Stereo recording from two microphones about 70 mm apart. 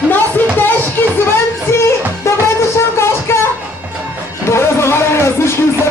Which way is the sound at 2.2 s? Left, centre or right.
Left.